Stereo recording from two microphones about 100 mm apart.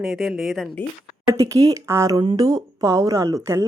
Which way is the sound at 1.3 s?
35° right (ahead or behind).